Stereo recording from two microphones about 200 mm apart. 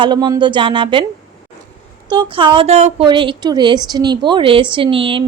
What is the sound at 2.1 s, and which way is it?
A woman's voice, 25° right (ahead or behind).